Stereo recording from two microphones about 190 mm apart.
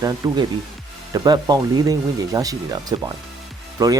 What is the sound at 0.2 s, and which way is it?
Speech, 20° right (ahead or behind).